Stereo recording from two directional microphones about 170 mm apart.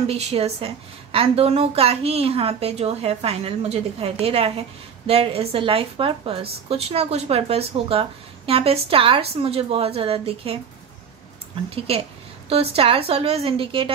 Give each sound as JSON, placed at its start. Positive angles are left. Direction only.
{"t": 0.0, "sound": "a woman's voice", "side_deg": -35}
{"t": 12.4, "sound": "a woman's voice", "side_deg": -35}